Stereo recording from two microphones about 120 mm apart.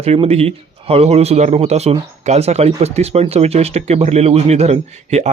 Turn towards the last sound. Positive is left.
turn(degrees=-65)  # may be behind; listen again after turning